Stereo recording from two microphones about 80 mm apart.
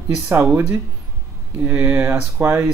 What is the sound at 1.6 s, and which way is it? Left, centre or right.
Speech, right.